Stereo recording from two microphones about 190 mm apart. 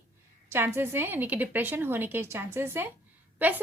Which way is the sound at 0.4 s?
10° right (ahead or behind).